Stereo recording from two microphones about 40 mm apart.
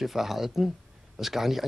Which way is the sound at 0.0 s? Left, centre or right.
Centre.